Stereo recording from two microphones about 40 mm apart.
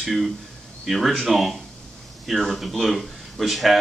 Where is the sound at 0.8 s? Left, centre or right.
Centre.